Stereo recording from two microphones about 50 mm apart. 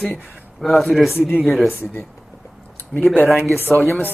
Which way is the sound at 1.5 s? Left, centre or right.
Centre.